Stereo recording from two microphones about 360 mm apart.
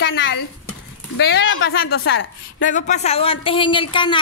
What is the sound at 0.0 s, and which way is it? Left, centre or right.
Speech, left.